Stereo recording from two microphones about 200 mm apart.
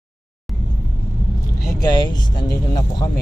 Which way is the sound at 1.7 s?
20° left (ahead or behind).